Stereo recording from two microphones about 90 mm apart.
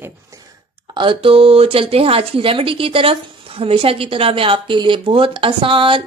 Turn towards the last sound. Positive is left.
turn(degrees=-70)  # may be behind; listen again after turning